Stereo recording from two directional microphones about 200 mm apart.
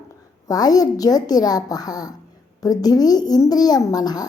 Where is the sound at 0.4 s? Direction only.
20° left (ahead or behind).